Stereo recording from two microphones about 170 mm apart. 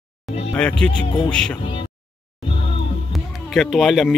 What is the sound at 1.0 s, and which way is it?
Speech, 30° left (ahead or behind).